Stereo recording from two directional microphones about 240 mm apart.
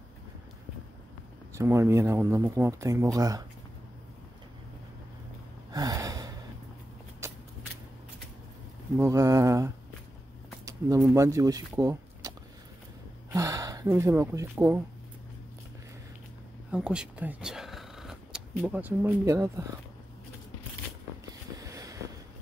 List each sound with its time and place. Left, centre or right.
1.6 s speech: centre
5.7 s gasp: centre
7.2 s a sound: centre
8.9 s speech: centre
10.6 s a sound: centre
11.0 s speech: centre
16.7 s speech: centre
21.3 s vehicle: centre